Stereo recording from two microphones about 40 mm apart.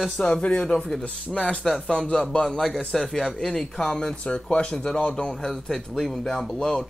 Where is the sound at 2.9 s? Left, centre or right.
Centre.